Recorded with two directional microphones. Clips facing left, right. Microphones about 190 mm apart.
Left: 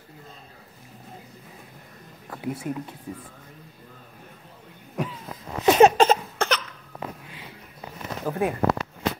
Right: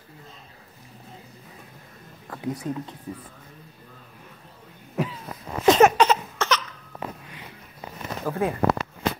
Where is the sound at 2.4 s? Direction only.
25° left (ahead or behind).